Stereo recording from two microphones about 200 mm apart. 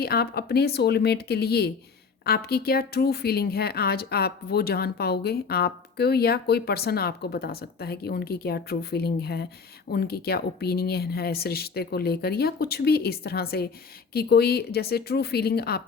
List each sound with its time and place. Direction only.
0.0 s speech: 50° left (ahead or behind)